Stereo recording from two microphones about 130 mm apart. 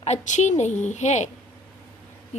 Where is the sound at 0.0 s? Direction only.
60° left (ahead or behind).